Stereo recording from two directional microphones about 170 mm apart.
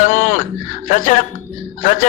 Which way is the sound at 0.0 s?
50° left (ahead or behind).